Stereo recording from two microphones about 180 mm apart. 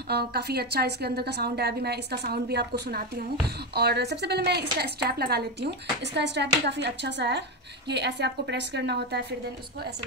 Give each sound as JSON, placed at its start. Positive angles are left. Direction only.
{"t": 0.1, "sound": "a woman's voice", "side_deg": -60}